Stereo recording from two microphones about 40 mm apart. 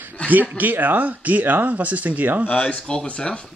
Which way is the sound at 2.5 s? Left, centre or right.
Left.